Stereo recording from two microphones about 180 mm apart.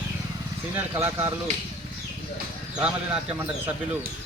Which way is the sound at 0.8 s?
15° right (ahead or behind).